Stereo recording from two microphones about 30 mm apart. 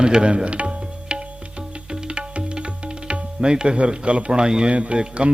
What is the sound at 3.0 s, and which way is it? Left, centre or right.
Speech, right.